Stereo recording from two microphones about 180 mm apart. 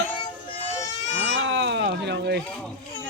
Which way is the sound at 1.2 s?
85° right.